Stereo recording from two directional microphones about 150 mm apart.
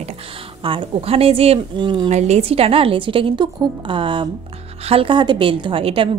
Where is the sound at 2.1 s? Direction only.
45° right (ahead or behind).